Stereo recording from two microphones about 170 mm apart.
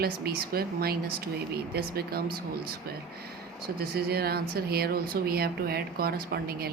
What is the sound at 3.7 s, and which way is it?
Speech, 65° right (ahead or behind).